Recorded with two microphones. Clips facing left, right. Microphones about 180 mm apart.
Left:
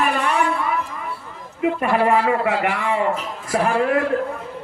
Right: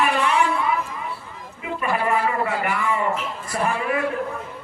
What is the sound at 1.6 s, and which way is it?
A man's voice, 65° left (ahead or behind).